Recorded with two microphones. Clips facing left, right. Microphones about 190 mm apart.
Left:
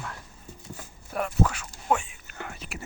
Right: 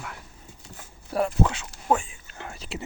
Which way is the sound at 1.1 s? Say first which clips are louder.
Right 3 dB; 30° right (ahead or behind).